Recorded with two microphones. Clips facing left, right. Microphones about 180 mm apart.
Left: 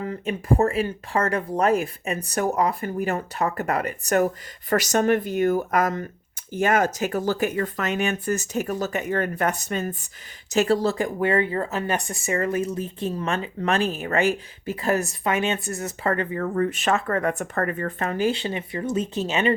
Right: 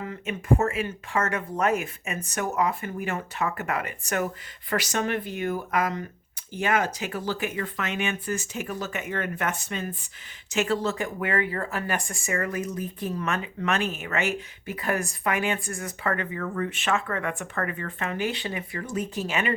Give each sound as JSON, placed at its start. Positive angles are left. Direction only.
{"t": 0.0, "sound": "speech", "side_deg": 35}